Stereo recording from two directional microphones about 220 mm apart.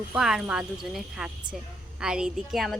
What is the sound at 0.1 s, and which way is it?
A woman's voice, centre (ahead or behind).